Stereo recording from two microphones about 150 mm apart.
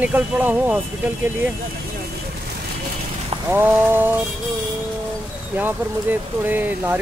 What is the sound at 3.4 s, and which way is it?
Speech, 15° right (ahead or behind).